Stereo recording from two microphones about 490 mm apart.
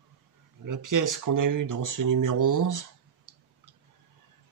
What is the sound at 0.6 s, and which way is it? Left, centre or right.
Speech, right.